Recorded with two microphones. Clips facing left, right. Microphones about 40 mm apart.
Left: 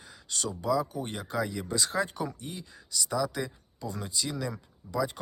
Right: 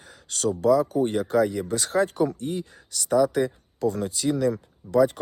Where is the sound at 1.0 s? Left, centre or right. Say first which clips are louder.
Right 11 dB; right.